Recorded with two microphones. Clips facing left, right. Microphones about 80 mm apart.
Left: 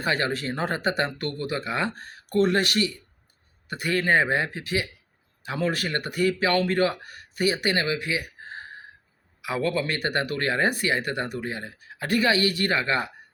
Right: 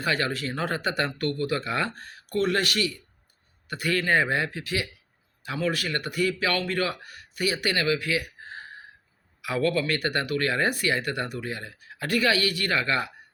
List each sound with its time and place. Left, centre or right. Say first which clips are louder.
0.0 s speech: left 1 dB; left